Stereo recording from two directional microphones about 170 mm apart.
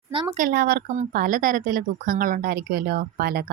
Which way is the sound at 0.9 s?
55° right (ahead or behind).